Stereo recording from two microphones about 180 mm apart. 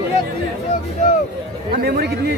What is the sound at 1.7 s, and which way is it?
Speech, 60° right (ahead or behind).